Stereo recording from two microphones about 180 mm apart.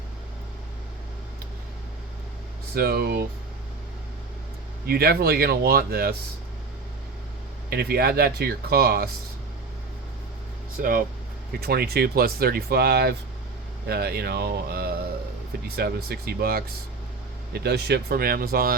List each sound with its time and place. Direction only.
2.7 s speech: 60° right (ahead or behind)
4.9 s speech: 60° right (ahead or behind)
7.7 s speech: 60° right (ahead or behind)
10.8 s speech: 50° right (ahead or behind)